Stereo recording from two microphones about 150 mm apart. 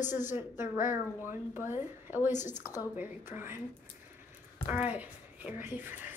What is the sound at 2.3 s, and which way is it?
Speech, 55° left (ahead or behind).